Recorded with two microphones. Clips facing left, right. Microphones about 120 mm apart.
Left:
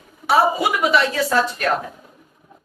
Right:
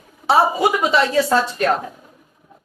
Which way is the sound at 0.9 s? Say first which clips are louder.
Right 2 dB; 25° right (ahead or behind).